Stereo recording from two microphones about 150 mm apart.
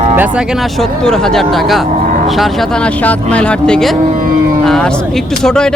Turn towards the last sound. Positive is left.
turn(degrees=5)  # may be behind; listen again after turning